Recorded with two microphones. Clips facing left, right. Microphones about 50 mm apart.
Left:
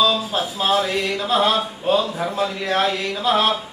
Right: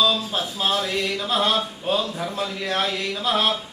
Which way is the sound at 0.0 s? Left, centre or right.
Centre.